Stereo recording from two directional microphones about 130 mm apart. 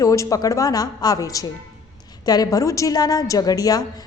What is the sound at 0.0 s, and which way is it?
A woman's voice, 25° left (ahead or behind).